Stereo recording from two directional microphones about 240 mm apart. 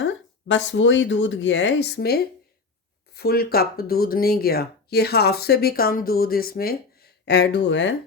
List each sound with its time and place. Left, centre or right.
0.0 s speech: left